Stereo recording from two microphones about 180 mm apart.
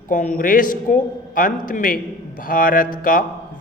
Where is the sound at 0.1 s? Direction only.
45° left (ahead or behind).